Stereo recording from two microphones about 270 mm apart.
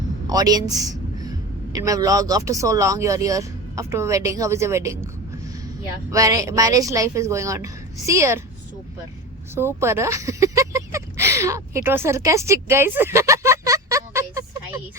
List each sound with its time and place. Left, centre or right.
0.3 s a man's voice: centre
6.1 s speech: centre
9.6 s speech: centre